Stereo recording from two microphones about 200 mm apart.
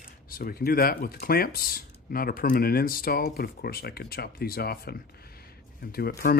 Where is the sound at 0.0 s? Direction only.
50° left (ahead or behind).